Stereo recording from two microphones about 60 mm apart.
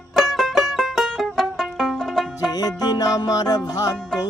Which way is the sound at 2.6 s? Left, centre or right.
Left.